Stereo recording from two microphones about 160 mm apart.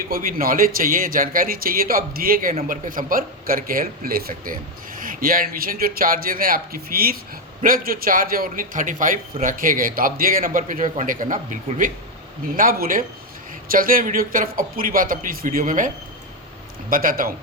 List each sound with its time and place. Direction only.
0.1 s speech: 60° right (ahead or behind)
16.9 s speech: 60° right (ahead or behind)